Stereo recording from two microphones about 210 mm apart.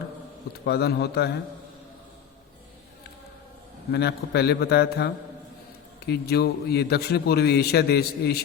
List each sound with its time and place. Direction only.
0.6 s a man's voice: 50° left (ahead or behind)
3.9 s a man's voice: 50° left (ahead or behind)